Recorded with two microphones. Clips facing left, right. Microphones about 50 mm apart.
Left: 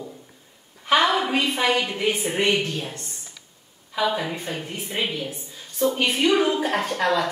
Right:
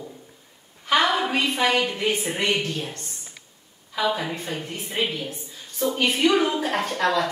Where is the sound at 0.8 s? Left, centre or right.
Centre.